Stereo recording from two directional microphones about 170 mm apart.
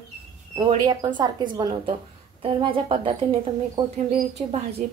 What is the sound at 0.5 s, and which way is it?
Speech, 25° right (ahead or behind).